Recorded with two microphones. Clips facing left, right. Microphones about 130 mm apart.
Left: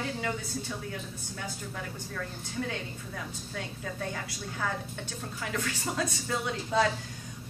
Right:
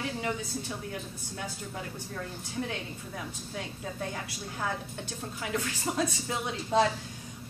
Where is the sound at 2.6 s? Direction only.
5° right (ahead or behind).